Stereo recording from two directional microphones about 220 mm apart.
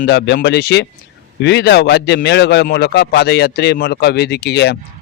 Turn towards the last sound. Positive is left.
turn(degrees=50)  # may be behind; listen again after turning